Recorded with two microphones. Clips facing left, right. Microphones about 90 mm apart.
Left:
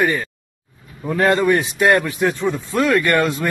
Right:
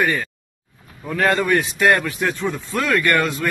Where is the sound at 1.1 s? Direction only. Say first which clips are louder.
Left 3 dB; 10° left (ahead or behind).